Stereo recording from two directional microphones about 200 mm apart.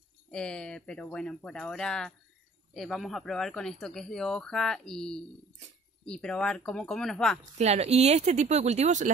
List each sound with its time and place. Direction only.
0.3 s speech: 5° left (ahead or behind)
7.5 s speech: 30° right (ahead or behind)